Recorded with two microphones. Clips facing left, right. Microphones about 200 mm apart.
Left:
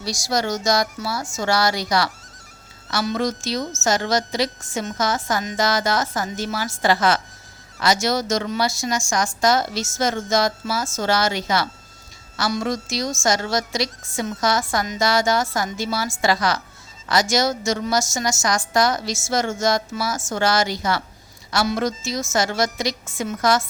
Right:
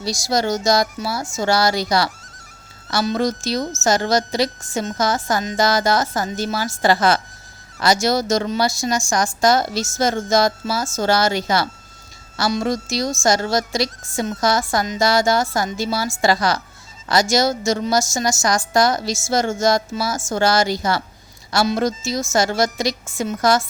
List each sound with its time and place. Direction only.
0.0 s a woman's voice: 25° right (ahead or behind)